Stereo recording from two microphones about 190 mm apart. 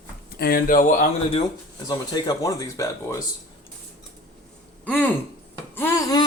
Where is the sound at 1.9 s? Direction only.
20° left (ahead or behind).